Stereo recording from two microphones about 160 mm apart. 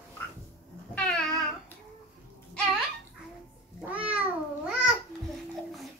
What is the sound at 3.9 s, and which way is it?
Babbling, 10° right (ahead or behind).